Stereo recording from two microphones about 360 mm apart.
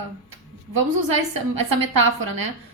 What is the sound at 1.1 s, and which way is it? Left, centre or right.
A woman's voice, right.